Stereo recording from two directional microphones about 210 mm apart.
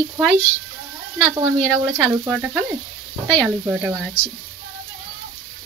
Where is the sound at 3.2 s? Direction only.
10° left (ahead or behind).